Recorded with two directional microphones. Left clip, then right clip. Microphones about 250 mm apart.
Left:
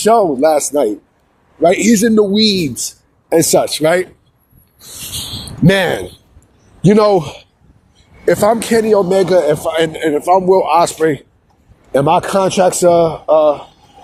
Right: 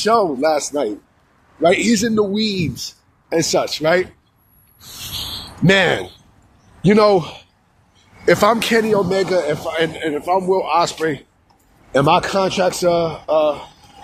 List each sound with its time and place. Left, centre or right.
0.0 s a man's voice: left
2.8 s a man's voice: left